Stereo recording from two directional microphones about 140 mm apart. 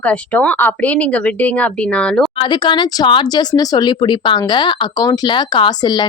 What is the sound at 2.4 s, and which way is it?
Speech, 35° left (ahead or behind).